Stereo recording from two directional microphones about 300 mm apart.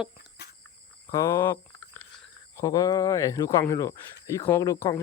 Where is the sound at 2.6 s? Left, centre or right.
Centre.